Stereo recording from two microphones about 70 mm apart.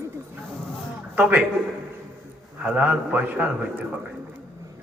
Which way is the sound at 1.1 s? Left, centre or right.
Centre.